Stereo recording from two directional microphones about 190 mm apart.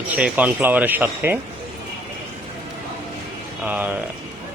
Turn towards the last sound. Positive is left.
turn(degrees=-10)  # may be behind; listen again after turning